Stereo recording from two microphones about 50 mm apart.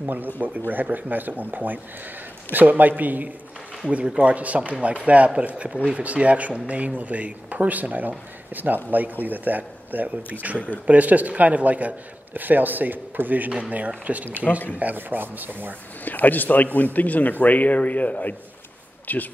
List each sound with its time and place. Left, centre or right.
0.4 s speech: right
3.9 s speech: right
13.5 s speech: right
13.7 s speech: right
16.0 s speech: left